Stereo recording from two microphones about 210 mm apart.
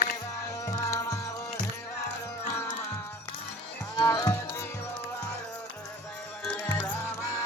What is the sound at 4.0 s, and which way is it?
Music, 15° left (ahead or behind).